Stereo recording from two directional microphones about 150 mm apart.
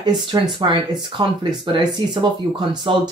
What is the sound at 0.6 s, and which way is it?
Speech, 30° right (ahead or behind).